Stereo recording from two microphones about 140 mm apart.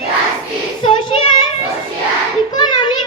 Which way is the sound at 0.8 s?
35° left (ahead or behind).